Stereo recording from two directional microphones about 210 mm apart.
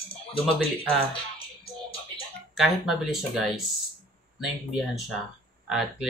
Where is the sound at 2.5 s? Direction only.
Centre (ahead or behind).